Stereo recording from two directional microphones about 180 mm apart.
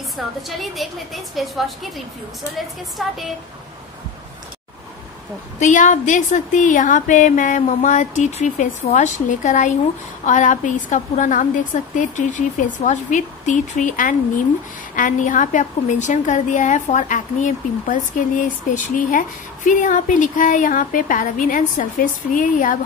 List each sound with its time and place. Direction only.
0.5 s a woman's voice: centre (ahead or behind)
5.6 s speech: 45° left (ahead or behind)